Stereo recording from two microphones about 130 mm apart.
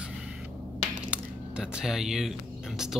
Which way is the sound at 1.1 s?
5° right (ahead or behind).